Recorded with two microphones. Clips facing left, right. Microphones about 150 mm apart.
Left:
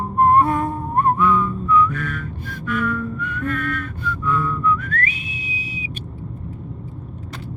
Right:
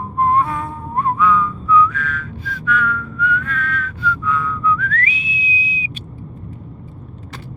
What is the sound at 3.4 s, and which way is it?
Whistling, 50° left (ahead or behind).